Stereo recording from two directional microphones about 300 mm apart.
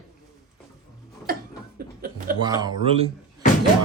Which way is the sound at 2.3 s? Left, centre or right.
Centre.